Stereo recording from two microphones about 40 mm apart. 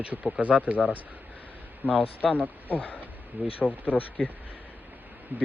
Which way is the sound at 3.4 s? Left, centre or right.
Right.